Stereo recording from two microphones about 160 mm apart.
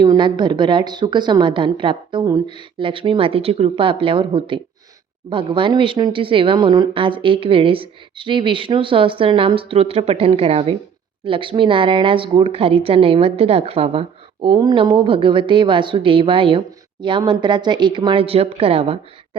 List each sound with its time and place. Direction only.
0.0 s a woman's voice: 30° right (ahead or behind)